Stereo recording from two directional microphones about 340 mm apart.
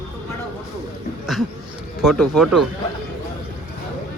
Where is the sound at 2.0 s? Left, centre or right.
Centre.